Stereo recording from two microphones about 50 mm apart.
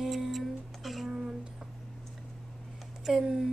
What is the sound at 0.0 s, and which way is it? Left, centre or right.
Music, centre.